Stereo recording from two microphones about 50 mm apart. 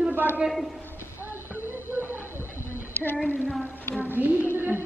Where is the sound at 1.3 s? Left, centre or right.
Right.